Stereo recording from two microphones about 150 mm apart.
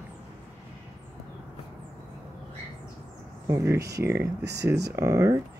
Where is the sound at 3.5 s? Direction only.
20° right (ahead or behind).